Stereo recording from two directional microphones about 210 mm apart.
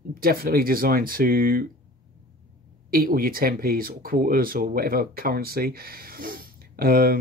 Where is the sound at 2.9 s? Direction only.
45° right (ahead or behind).